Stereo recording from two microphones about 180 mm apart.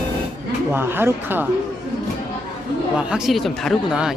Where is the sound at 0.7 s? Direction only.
10° right (ahead or behind).